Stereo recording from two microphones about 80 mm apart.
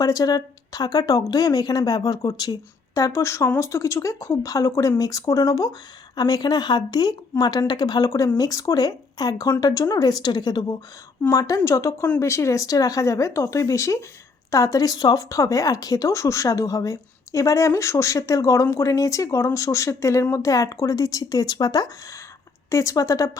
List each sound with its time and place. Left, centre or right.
0.0 s speech: left
11.6 s speech: left
22.7 s speech: left